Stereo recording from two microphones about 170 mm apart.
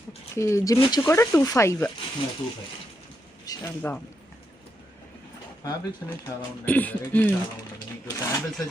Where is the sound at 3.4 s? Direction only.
20° left (ahead or behind).